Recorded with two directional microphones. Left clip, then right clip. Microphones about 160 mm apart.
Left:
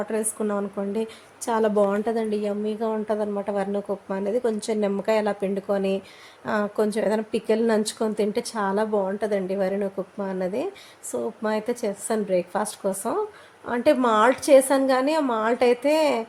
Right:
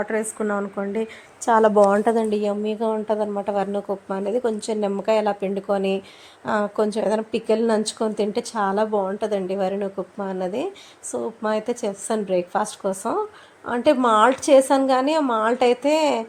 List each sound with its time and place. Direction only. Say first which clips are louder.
0.0 s a woman's voice: right 2 dB; 5° right (ahead or behind)